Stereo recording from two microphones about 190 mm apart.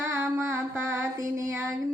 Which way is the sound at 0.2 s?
10° right (ahead or behind).